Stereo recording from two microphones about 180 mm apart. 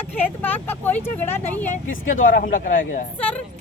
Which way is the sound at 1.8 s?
45° left (ahead or behind).